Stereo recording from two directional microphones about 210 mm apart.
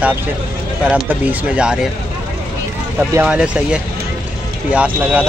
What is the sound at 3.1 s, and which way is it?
Speech, 5° right (ahead or behind).